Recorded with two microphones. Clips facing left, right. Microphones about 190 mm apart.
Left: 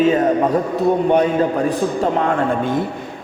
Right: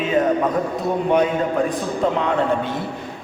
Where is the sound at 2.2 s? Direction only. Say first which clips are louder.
Left 2 dB; 50° left (ahead or behind).